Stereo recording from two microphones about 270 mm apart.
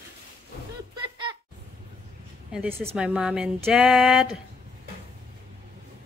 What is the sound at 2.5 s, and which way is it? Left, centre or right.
Speech, centre.